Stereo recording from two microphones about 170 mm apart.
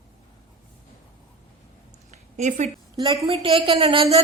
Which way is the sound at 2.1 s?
45° right (ahead or behind).